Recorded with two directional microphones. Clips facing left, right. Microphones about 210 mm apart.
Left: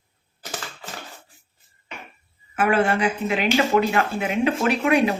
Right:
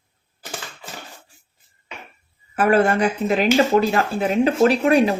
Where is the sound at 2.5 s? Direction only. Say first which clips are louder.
Right 3 dB; 40° right (ahead or behind).